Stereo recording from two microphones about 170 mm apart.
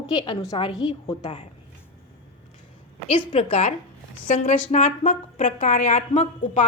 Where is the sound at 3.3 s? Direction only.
35° left (ahead or behind).